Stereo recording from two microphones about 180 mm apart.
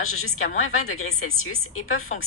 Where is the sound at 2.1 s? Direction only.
40° left (ahead or behind).